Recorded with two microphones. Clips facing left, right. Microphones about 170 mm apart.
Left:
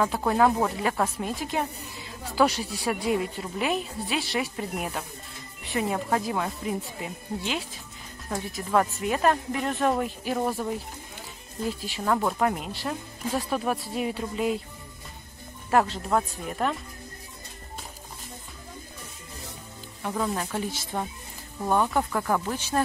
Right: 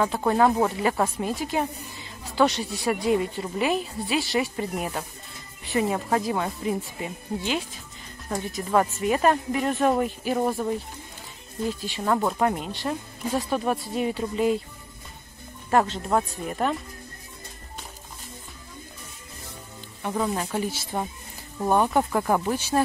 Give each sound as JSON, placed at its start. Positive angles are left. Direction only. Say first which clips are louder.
{"t": 0.0, "sound": "a woman's voice", "louder": "right 1 dB", "side_deg": 0}
{"t": 15.7, "sound": "a woman's voice", "louder": "right 1 dB", "side_deg": 0}
{"t": 20.0, "sound": "a woman's voice", "louder": "right 2 dB", "side_deg": -5}
{"t": 21.6, "sound": "speech", "louder": "right 3 dB", "side_deg": -20}
{"t": 22.5, "sound": "speech", "louder": "right 4 dB", "side_deg": -10}